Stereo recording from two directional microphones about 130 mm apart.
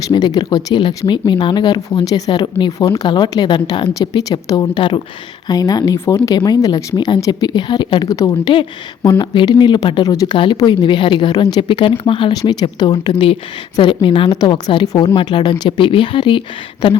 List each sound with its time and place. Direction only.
0.1 s speech: 35° left (ahead or behind)